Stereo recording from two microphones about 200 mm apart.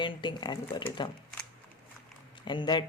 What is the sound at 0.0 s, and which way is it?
Speech, 25° left (ahead or behind).